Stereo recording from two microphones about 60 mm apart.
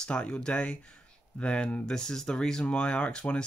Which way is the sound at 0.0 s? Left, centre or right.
Centre.